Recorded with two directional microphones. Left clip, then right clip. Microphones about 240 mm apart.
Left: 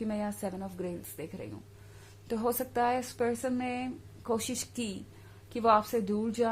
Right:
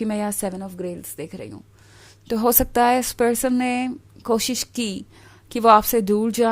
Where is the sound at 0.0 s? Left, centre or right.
Right.